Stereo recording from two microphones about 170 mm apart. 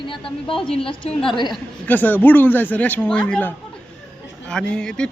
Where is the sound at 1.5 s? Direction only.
10° left (ahead or behind).